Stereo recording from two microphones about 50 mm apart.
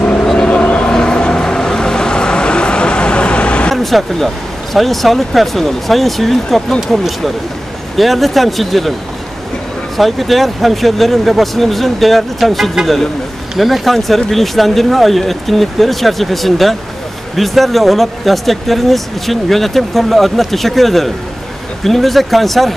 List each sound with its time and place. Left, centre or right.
0.2 s vehicle: centre
0.5 s vehicle: left
3.7 s speech: centre
8.0 s speech: centre
9.9 s speech: centre